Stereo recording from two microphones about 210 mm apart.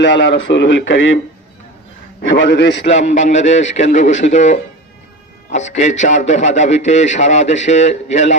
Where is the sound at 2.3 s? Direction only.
50° left (ahead or behind).